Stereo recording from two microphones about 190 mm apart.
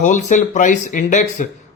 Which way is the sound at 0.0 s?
40° left (ahead or behind).